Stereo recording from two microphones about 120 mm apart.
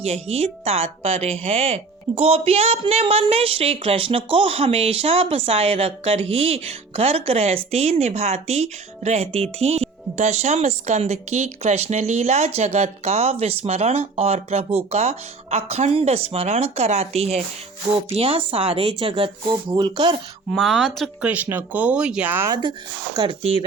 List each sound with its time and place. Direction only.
0.0 s speech: 60° right (ahead or behind)
18.1 s speech: 50° right (ahead or behind)
20.5 s a woman's voice: centre (ahead or behind)
21.2 s speech: 10° right (ahead or behind)
22.4 s speech: 35° right (ahead or behind)
23.4 s speech: 50° right (ahead or behind)